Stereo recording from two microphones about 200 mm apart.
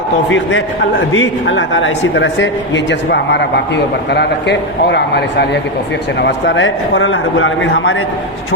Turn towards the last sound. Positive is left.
turn(degrees=75)  # may be behind; listen again after turning